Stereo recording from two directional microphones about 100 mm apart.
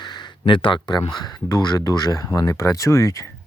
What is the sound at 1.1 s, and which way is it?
Speech, 45° left (ahead or behind).